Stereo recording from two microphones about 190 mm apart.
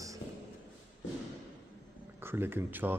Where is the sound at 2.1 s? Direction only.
10° right (ahead or behind).